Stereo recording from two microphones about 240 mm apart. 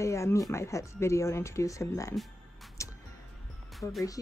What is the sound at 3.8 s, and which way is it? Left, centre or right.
Speech, centre.